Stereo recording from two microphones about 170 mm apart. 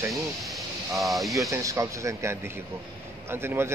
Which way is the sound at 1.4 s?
20° right (ahead or behind).